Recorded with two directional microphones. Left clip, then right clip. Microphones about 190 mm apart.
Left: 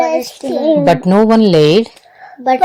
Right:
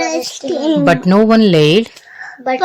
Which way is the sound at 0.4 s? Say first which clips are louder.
Left 1 dB; 35° left (ahead or behind).